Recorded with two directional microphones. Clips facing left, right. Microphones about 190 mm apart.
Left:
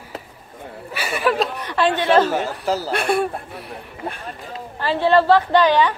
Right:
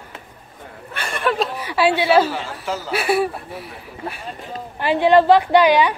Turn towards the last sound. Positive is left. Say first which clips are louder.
# right 2 dB
turn(degrees=-10)  # may be behind; listen again after turning